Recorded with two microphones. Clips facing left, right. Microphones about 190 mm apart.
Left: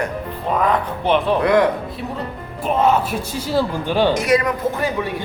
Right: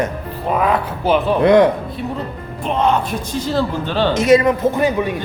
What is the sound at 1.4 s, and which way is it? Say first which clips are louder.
Speech: right 7 dB; 25° right (ahead or behind).